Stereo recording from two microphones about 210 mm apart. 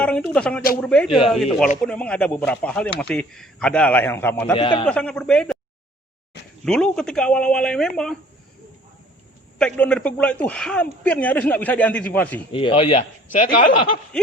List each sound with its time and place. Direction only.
0.0 s speech: 5° left (ahead or behind)
4.5 s a man's voice: 25° left (ahead or behind)
4.9 s speech: 5° left (ahead or behind)
6.7 s speech: 5° left (ahead or behind)
9.6 s a man's voice: 5° left (ahead or behind)
12.5 s a man's voice: 25° left (ahead or behind)
13.3 s speech: 40° left (ahead or behind)